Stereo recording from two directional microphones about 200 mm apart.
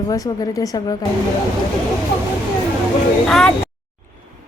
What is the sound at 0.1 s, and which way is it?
Speech, 20° left (ahead or behind).